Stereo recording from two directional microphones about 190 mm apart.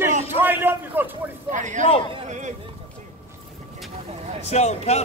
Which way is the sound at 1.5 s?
40° right (ahead or behind).